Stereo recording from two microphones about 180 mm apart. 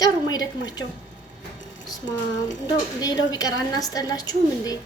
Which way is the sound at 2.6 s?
20° left (ahead or behind).